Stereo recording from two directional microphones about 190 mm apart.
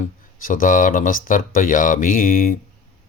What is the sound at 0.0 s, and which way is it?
Mantra, 45° left (ahead or behind).